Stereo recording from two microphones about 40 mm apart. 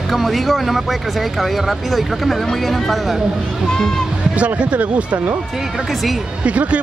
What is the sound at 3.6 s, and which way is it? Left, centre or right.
Speech, centre.